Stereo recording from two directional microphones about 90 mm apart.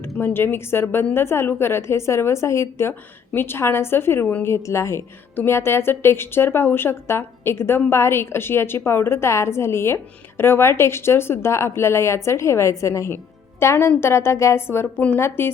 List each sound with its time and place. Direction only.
0.2 s a woman's voice: 25° left (ahead or behind)